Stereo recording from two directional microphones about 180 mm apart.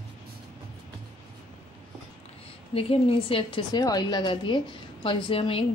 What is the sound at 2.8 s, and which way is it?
A woman's voice, 30° left (ahead or behind).